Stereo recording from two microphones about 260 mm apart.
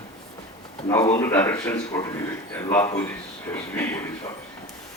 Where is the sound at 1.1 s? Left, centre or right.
Centre.